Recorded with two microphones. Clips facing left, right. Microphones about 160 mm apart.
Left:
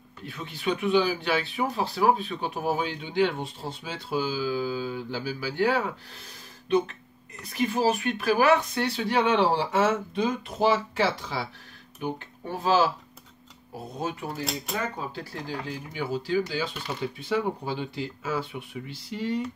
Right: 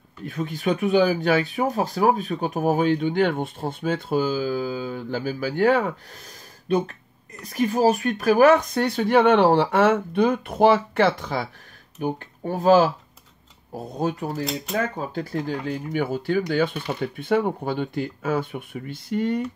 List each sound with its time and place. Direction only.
0.2 s speech: 45° right (ahead or behind)
7.4 s speech: 40° right (ahead or behind)
13.9 s speech: 40° right (ahead or behind)
15.1 s speech: 55° right (ahead or behind)